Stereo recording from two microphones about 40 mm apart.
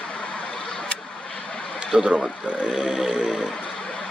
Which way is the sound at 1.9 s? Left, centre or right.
Right.